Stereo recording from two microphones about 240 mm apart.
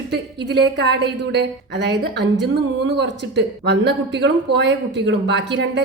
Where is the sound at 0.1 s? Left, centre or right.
Right.